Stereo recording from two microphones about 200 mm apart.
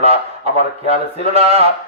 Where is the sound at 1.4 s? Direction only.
30° right (ahead or behind).